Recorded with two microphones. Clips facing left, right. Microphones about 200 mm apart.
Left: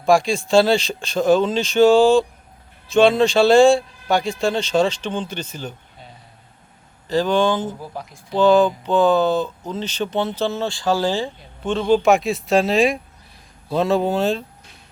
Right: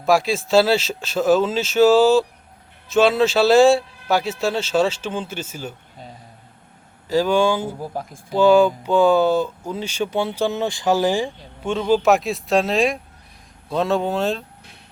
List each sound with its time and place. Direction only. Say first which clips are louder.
0.0 s a man's voice: left 1 dB; 5° right (ahead or behind)
7.1 s speech: even; 10° right (ahead or behind)
7.8 s speech: right 4 dB; 45° right (ahead or behind)
8.3 s a man's voice: right 1 dB; 10° right (ahead or behind)